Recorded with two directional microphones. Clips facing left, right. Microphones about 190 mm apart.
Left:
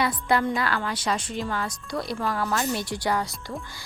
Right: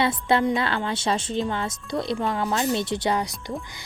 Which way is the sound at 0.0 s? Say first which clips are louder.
Right 2 dB; 25° right (ahead or behind).